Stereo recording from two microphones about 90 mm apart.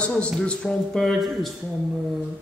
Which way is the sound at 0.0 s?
10° left (ahead or behind).